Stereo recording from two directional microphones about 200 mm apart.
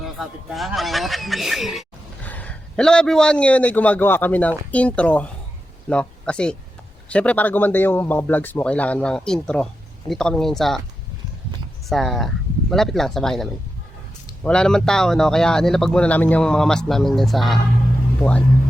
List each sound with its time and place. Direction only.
0.0 s a man's voice: centre (ahead or behind)
11.9 s speech: centre (ahead or behind)